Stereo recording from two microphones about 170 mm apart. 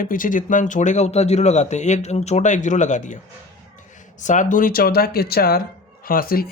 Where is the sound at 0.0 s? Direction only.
50° left (ahead or behind).